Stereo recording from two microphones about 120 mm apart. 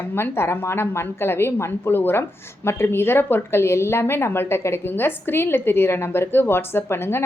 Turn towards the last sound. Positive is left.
turn(degrees=20)  # may be behind; listen again after turning